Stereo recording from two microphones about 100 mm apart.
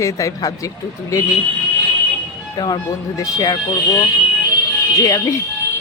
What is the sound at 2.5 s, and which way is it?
Speech, 40° left (ahead or behind).